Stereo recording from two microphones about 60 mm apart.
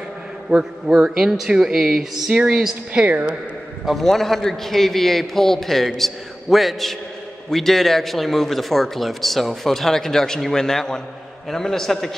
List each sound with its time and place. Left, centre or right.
0.5 s speech: centre
2.9 s a woman's voice: right
4.0 s a man's voice: centre